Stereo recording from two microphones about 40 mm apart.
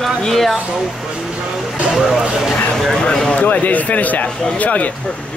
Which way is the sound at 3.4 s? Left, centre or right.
Left.